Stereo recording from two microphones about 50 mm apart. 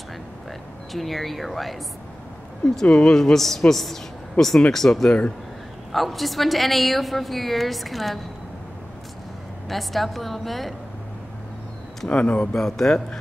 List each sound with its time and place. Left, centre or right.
0.9 s a woman's voice: centre
2.6 s a woman's voice: centre
9.7 s a woman's voice: centre
12.1 s speech: left
12.5 s speech: centre